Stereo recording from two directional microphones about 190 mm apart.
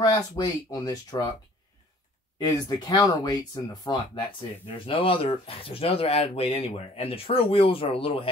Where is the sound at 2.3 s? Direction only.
20° left (ahead or behind).